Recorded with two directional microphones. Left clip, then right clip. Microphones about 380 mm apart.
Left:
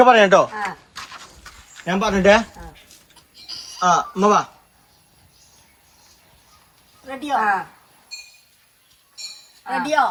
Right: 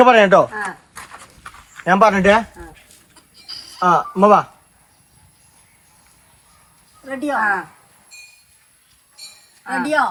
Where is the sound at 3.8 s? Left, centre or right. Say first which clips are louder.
Right 3 dB; centre.